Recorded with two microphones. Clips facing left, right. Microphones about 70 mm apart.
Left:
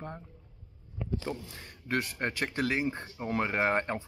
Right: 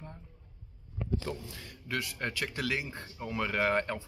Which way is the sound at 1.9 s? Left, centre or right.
Left.